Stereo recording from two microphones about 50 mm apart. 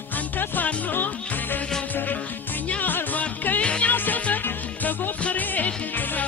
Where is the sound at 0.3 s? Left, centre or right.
Left.